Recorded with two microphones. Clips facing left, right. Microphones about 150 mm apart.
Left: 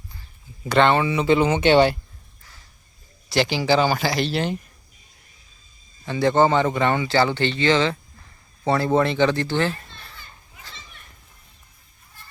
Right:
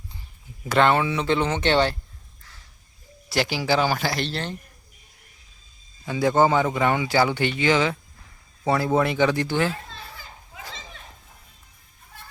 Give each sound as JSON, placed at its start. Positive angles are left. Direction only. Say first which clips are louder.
{"t": 0.6, "sound": "speech", "louder": "left 2 dB", "side_deg": 0}
{"t": 3.2, "sound": "speech", "louder": "left 3 dB", "side_deg": -5}
{"t": 4.3, "sound": "speech", "louder": "left 6 dB", "side_deg": 10}
{"t": 6.1, "sound": "speech", "louder": "left 1 dB", "side_deg": -5}
{"t": 9.7, "sound": "children playing", "louder": "right 5 dB", "side_deg": -90}